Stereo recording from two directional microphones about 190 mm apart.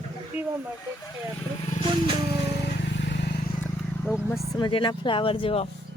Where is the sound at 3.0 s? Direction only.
65° left (ahead or behind).